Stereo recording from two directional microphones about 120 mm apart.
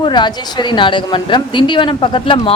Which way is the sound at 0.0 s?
40° left (ahead or behind).